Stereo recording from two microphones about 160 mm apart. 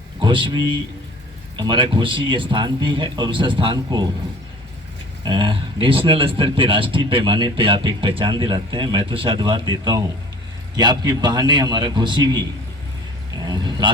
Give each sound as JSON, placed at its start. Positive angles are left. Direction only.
{"t": 0.2, "sound": "a man's voice", "side_deg": -30}
{"t": 5.2, "sound": "a man's voice", "side_deg": -30}
{"t": 13.4, "sound": "a man's voice", "side_deg": -25}